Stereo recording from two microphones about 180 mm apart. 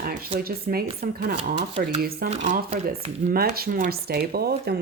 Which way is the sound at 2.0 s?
55° right (ahead or behind).